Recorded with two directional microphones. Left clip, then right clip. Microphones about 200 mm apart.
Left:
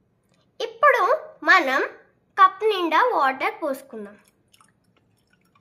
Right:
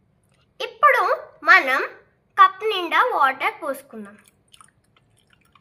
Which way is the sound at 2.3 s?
30° left (ahead or behind).